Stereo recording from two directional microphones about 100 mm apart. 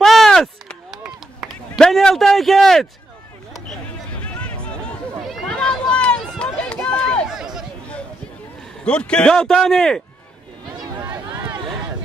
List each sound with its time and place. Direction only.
0.0 s chop: centre (ahead or behind)
1.8 s a sound: 5° left (ahead or behind)
4.2 s a sound: 15° left (ahead or behind)
5.2 s run: centre (ahead or behind)
7.2 s chatter: 5° right (ahead or behind)
8.8 s a man's voice: 10° left (ahead or behind)